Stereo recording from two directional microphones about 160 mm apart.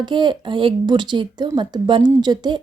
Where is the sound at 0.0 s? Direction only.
30° right (ahead or behind).